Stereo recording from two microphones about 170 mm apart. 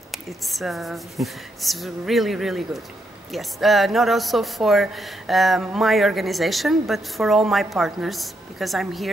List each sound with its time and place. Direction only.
0.1 s speech: centre (ahead or behind)